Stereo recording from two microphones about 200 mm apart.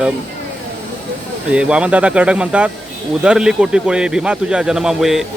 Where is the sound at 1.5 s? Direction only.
5° right (ahead or behind).